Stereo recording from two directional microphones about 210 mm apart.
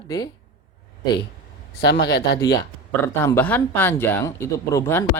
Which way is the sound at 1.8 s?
55° left (ahead or behind).